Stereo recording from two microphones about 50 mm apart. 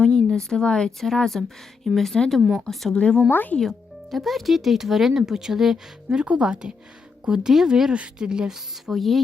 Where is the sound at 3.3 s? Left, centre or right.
Left.